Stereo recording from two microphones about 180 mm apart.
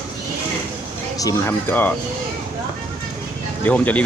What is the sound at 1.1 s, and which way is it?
Speech, 15° left (ahead or behind).